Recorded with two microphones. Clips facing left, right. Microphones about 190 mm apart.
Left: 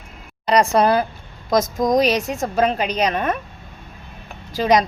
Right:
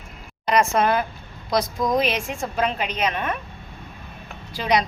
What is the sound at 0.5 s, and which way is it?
Speech, 35° left (ahead or behind).